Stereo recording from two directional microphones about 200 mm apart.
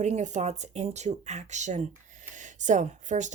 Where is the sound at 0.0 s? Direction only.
35° right (ahead or behind).